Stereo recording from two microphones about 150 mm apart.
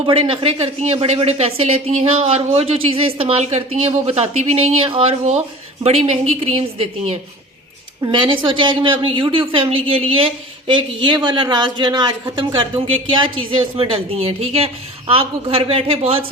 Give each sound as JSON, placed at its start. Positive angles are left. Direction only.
{"t": 0.0, "sound": "a woman's voice", "side_deg": -35}
{"t": 2.1, "sound": "a woman's voice", "side_deg": -40}